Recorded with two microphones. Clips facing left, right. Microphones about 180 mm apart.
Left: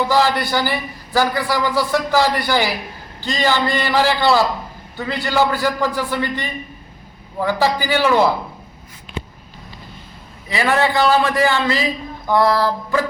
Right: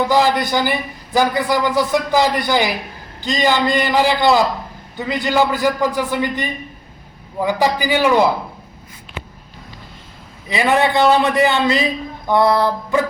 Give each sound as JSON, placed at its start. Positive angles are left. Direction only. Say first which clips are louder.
{"t": 0.1, "sound": "a man's voice", "louder": "right 2 dB", "side_deg": -15}
{"t": 10.5, "sound": "a man's voice", "louder": "right 2 dB", "side_deg": -20}